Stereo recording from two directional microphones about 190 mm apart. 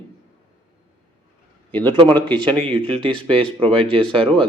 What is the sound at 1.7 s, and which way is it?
Speech, 10° left (ahead or behind).